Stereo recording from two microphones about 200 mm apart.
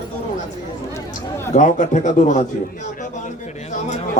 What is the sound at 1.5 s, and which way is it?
A man's voice, 40° left (ahead or behind).